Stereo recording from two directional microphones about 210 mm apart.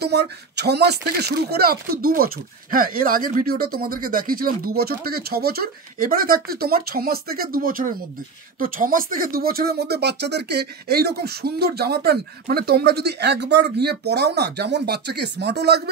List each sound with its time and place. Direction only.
0.0 s speech: 50° right (ahead or behind)